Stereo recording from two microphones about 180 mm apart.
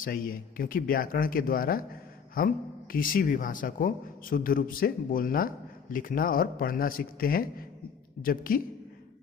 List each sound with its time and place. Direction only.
0.0 s a man's voice: 50° left (ahead or behind)